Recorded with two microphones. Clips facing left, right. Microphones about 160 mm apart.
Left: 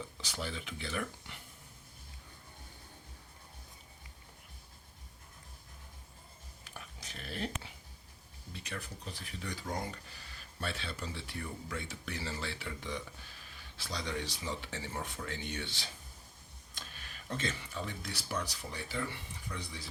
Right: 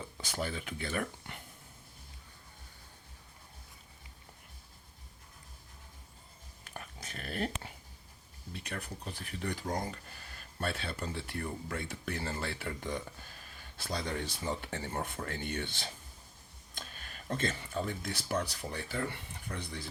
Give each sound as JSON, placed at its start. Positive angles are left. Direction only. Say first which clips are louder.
{"t": 0.2, "sound": "speech", "louder": "right 5 dB", "side_deg": -50}
{"t": 6.7, "sound": "dog", "louder": "right 4 dB", "side_deg": -50}
{"t": 8.5, "sound": "speech", "louder": "right 2 dB", "side_deg": -55}